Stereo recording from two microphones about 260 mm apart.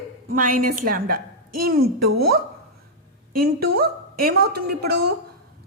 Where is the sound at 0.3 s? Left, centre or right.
Right.